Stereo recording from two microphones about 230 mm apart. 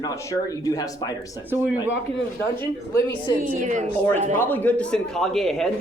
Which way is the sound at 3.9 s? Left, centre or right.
Centre.